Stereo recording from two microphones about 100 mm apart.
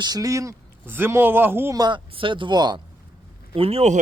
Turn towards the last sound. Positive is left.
turn(degrees=-75)  # may be behind; listen again after turning